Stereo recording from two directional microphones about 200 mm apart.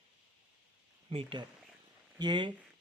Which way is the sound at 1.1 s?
25° right (ahead or behind).